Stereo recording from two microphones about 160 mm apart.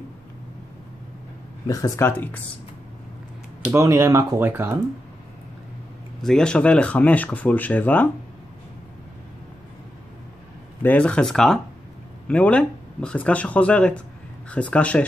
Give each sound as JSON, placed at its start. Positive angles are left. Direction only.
{"t": 1.7, "sound": "speech", "side_deg": 20}
{"t": 3.6, "sound": "speech", "side_deg": -20}
{"t": 6.2, "sound": "speech", "side_deg": 5}
{"t": 10.8, "sound": "speech", "side_deg": 10}